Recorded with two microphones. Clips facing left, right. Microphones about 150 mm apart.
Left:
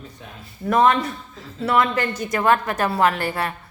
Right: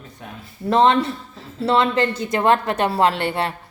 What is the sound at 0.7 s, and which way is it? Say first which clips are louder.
A woman's voice: right 2 dB; 25° right (ahead or behind).